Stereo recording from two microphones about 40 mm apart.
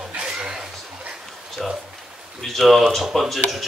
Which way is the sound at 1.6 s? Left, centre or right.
Centre.